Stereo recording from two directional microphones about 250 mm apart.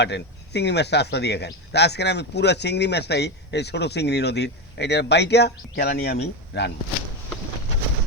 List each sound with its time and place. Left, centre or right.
0.0 s speech: left